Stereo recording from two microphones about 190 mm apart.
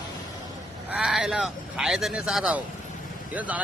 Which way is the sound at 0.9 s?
5° right (ahead or behind).